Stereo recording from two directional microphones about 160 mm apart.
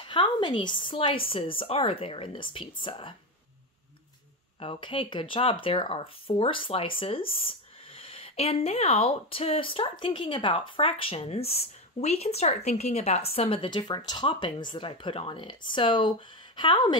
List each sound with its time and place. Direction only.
0.0 s speech: 30° left (ahead or behind)
4.6 s a woman's voice: 35° left (ahead or behind)